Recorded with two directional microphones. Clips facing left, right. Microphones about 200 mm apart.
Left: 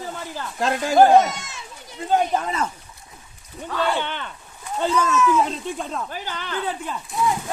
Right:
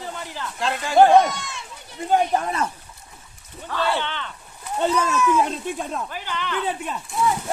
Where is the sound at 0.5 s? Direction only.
45° left (ahead or behind).